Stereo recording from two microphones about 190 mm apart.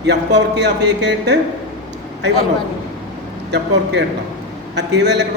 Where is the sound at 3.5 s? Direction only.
65° right (ahead or behind).